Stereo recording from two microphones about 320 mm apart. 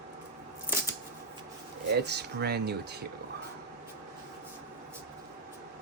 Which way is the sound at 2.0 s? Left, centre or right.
Right.